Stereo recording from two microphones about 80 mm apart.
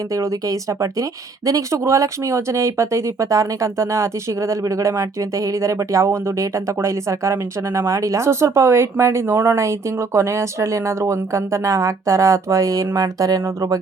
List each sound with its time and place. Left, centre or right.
0.1 s speech: right